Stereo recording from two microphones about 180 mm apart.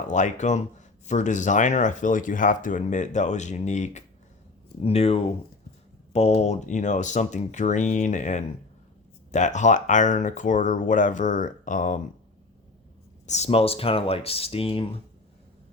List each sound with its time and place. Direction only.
0.1 s speech: 40° left (ahead or behind)
13.2 s speech: 40° left (ahead or behind)